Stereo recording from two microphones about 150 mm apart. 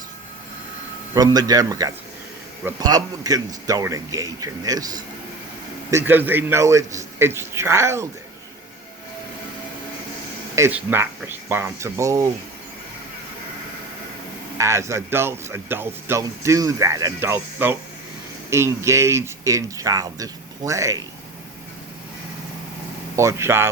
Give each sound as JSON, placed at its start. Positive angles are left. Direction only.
{"t": 1.1, "sound": "speech", "side_deg": -25}
{"t": 5.9, "sound": "speech", "side_deg": -15}
{"t": 10.5, "sound": "speech", "side_deg": -15}
{"t": 14.6, "sound": "speech", "side_deg": -20}
{"t": 23.1, "sound": "speech", "side_deg": -20}